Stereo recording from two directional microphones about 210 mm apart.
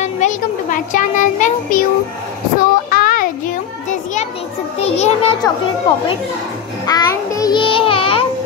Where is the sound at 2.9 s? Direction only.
45° left (ahead or behind).